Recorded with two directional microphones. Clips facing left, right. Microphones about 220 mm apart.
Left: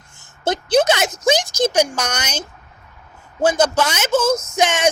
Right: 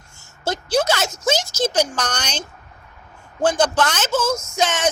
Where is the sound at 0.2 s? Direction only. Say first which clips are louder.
Left 4 dB; 20° left (ahead or behind).